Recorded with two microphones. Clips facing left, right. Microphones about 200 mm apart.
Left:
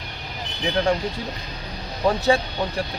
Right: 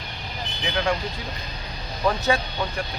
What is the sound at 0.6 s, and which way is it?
Speech, 35° left (ahead or behind).